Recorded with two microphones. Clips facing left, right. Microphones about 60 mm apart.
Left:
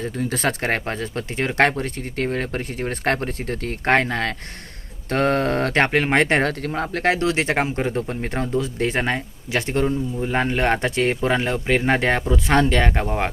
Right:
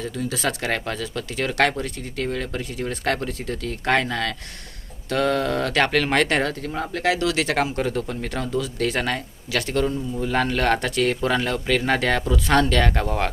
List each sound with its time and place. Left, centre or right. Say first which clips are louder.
0.0 s speech: left 2 dB; left
6.4 s speech: left 3 dB; left